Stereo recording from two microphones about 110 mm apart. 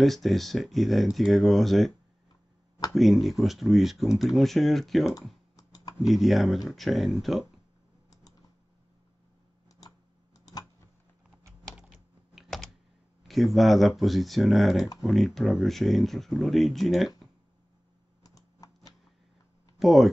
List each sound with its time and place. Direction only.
0.0 s speech: centre (ahead or behind)
5.1 s typing: 35° left (ahead or behind)
6.0 s speech: centre (ahead or behind)
9.7 s tick-tock: 35° left (ahead or behind)
11.9 s typing: centre (ahead or behind)
13.3 s speech: centre (ahead or behind)
18.2 s computer keyboard: 35° left (ahead or behind)
19.8 s speech: centre (ahead or behind)